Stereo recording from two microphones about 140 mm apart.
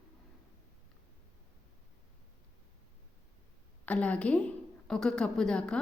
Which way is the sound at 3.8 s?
10° left (ahead or behind).